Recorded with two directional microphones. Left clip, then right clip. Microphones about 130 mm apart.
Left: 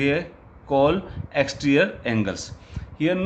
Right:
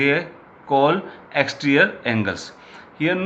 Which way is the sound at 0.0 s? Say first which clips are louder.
Right 4 dB; 90° left.